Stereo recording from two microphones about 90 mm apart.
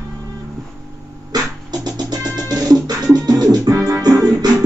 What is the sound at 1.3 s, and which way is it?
Music, 50° right (ahead or behind).